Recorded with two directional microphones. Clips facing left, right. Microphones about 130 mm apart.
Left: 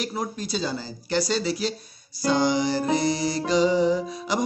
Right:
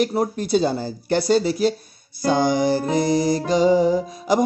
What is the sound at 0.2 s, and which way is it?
Speech, 55° right (ahead or behind).